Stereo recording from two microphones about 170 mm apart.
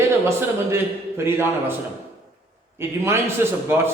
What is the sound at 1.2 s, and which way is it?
Speech, 15° right (ahead or behind).